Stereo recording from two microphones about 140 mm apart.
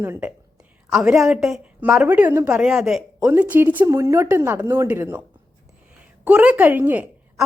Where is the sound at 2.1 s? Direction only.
15° right (ahead or behind).